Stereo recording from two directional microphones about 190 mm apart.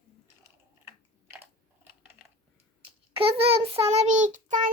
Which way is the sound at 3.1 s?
30° right (ahead or behind).